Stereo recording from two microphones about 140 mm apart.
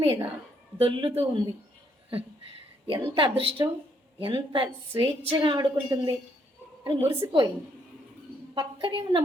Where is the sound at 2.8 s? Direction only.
35° right (ahead or behind).